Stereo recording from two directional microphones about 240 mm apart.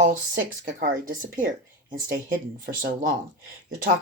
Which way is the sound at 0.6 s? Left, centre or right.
Right.